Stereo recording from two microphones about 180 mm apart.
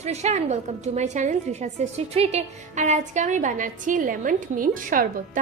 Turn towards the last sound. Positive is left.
turn(degrees=-50)  # may be behind; listen again after turning